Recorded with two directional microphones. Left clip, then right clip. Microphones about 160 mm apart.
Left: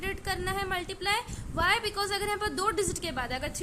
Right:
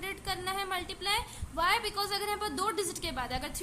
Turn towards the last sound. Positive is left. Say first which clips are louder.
# left 3 dB
turn(degrees=15)  # may be behind; listen again after turning